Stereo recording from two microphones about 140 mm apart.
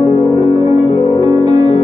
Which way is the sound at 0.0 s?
35° left (ahead or behind).